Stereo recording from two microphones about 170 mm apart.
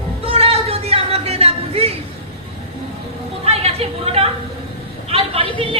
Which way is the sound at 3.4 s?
35° right (ahead or behind).